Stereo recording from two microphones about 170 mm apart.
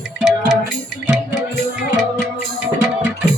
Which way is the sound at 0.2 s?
5° right (ahead or behind).